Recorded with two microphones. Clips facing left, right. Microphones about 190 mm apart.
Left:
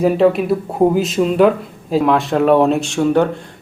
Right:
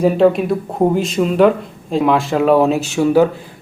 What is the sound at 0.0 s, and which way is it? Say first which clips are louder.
Speech: right 1 dB; centre (ahead or behind).